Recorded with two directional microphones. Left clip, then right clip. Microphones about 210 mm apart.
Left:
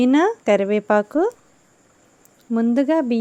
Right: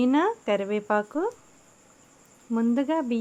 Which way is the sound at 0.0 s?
25° left (ahead or behind).